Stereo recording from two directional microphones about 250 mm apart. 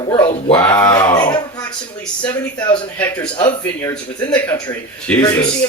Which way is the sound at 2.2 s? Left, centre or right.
Centre.